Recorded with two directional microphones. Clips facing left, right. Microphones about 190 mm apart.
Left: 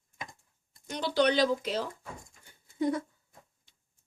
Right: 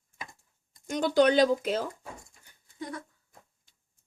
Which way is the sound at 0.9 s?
45° right (ahead or behind).